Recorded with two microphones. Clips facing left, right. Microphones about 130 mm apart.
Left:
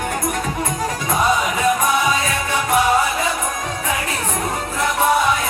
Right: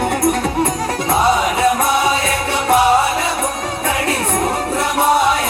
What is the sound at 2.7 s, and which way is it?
Music, 30° right (ahead or behind).